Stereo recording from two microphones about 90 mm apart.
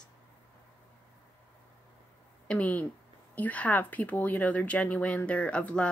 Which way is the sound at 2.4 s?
15° left (ahead or behind).